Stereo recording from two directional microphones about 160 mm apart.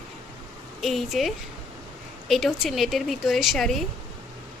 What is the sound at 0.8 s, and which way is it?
Speech, centre (ahead or behind).